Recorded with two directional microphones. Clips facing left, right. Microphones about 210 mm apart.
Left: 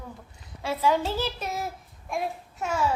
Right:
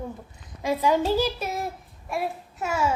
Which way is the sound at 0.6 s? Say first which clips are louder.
Right 2 dB; 15° right (ahead or behind).